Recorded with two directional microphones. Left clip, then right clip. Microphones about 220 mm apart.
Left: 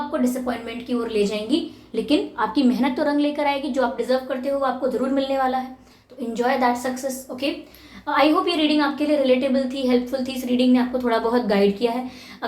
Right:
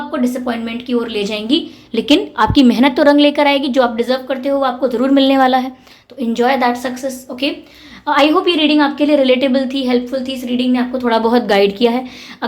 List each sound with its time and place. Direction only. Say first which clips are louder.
0.1 s a woman's voice: right 8 dB; 35° right (ahead or behind)
8.0 s a woman's voice: right 7 dB; 45° right (ahead or behind)
9.7 s a woman's voice: right 5 dB; 30° right (ahead or behind)